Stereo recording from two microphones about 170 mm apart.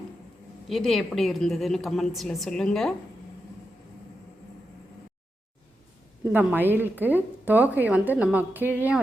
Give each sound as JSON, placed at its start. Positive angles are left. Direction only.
{"t": 0.7, "sound": "a woman's voice", "side_deg": 0}
{"t": 6.3, "sound": "a woman's voice", "side_deg": -10}